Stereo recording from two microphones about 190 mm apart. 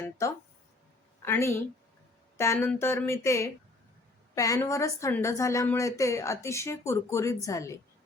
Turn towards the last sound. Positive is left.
turn(degrees=15)  # may be behind; listen again after turning